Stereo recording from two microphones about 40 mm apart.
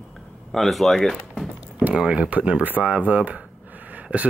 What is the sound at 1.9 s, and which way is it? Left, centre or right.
Speech, right.